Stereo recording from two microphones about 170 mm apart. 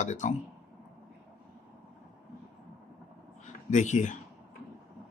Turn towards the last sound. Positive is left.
turn(degrees=45)  # may be behind; listen again after turning